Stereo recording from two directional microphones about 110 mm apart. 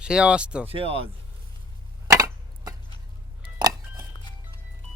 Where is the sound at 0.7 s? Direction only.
60° right (ahead or behind).